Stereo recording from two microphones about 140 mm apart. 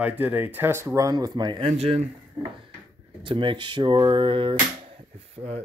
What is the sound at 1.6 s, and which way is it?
Speech, 45° right (ahead or behind).